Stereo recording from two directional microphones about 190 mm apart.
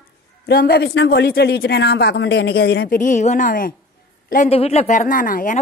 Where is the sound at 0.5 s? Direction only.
55° left (ahead or behind).